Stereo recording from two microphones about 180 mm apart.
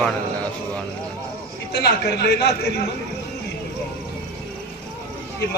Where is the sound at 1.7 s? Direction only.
65° left (ahead or behind).